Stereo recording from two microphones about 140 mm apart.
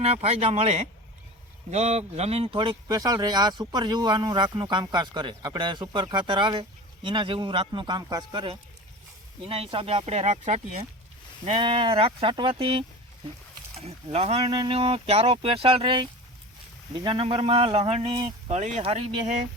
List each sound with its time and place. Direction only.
0.0 s speech: 50° right (ahead or behind)
11.4 s speech: 35° right (ahead or behind)
18.5 s speech: 60° right (ahead or behind)
18.8 s speech: 45° right (ahead or behind)